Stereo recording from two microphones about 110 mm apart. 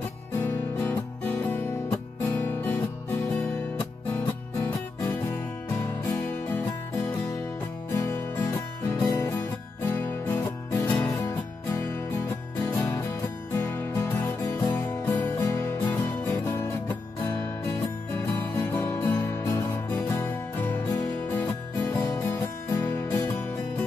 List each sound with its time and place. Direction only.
0.4 s music: 20° left (ahead or behind)
5.8 s music: 30° left (ahead or behind)
13.6 s music: 20° left (ahead or behind)
22.0 s music: 30° left (ahead or behind)